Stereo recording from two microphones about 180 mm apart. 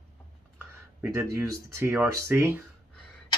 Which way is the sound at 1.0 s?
15° right (ahead or behind).